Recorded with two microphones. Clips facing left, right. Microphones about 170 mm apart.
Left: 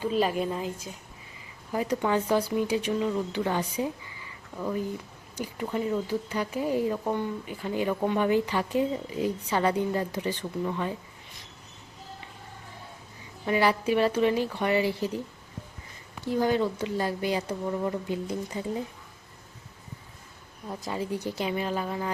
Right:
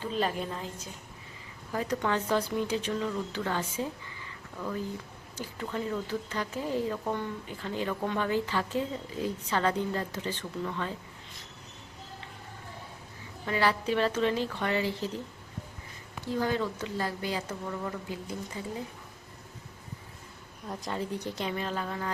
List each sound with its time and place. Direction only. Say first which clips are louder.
0.0 s speech: left 5 dB; 10° left (ahead or behind)
13.4 s speech: left 4 dB; 15° left (ahead or behind)
16.4 s speech: left 5 dB; 15° left (ahead or behind)
20.7 s speech: left 2 dB; 5° left (ahead or behind)